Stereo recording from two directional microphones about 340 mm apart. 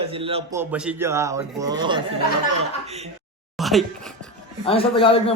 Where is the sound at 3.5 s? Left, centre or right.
Centre.